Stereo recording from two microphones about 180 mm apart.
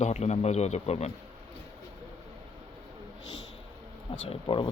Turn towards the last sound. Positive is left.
turn(degrees=30)  # may be behind; listen again after turning